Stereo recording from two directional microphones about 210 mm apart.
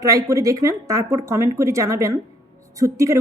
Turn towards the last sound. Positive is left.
turn(degrees=-15)  # may be behind; listen again after turning